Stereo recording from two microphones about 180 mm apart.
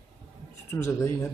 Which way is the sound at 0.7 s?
15° left (ahead or behind).